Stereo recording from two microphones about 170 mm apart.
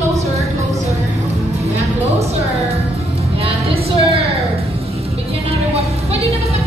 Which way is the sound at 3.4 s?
35° right (ahead or behind).